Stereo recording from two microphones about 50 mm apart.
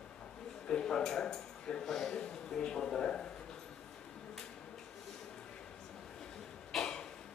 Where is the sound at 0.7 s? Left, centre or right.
Centre.